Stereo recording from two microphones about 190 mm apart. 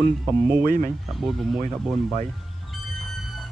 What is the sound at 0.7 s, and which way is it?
Speech, 45° right (ahead or behind).